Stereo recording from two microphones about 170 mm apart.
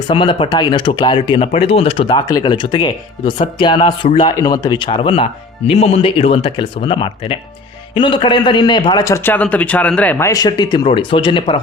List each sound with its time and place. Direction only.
0.1 s speech: 30° left (ahead or behind)